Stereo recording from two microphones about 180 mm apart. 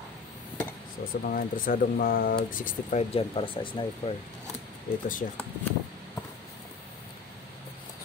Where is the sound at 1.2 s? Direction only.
50° left (ahead or behind).